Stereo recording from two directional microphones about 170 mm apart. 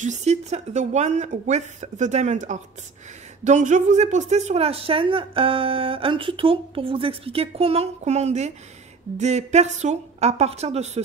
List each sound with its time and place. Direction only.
0.0 s speech: 45° right (ahead or behind)